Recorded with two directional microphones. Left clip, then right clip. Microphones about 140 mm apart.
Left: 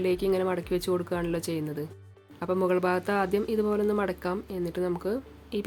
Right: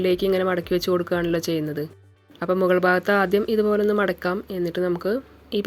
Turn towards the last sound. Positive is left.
turn(degrees=-25)  # may be behind; listen again after turning